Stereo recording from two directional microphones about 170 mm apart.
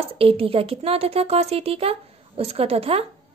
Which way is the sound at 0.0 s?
35° right (ahead or behind).